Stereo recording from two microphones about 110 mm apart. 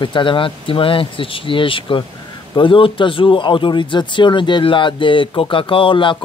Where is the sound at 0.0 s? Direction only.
50° left (ahead or behind).